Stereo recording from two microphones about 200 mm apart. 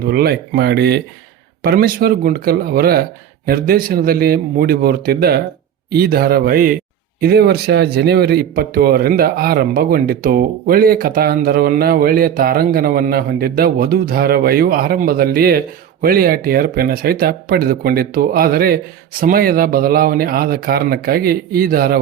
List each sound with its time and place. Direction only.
0.0 s speech: 50° right (ahead or behind)